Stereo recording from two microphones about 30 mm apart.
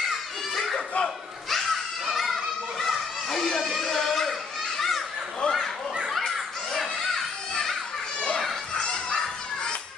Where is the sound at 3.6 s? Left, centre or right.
Centre.